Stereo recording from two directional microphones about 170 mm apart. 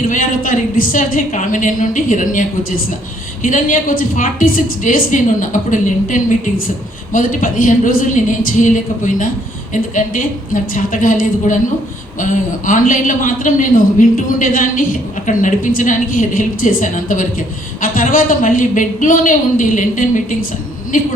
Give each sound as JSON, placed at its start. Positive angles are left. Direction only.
{"t": 0.1, "sound": "a man's voice", "side_deg": 50}